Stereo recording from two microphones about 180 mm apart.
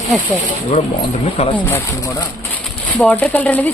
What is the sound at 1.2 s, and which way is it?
Speech, 30° left (ahead or behind).